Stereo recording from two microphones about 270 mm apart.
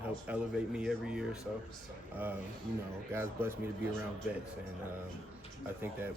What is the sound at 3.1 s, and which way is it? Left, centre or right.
Speech, centre.